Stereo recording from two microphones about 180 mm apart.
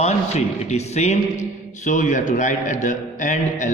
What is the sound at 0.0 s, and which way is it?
A man's voice, 35° left (ahead or behind).